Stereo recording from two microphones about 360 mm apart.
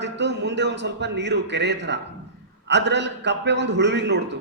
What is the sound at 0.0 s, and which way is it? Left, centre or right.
A man's voice, right.